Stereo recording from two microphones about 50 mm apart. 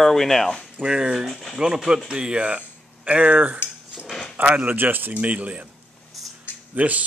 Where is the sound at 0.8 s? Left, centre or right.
Right.